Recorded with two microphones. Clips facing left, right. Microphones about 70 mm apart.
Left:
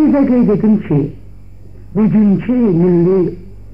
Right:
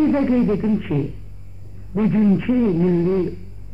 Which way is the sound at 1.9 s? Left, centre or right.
Centre.